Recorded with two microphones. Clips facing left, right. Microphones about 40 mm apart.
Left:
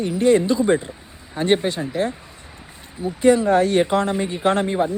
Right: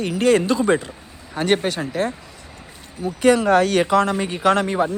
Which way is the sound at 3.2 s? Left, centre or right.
Right.